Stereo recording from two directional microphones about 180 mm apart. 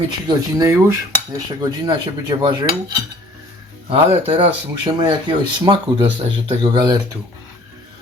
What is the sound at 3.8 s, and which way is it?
Speech, 30° right (ahead or behind).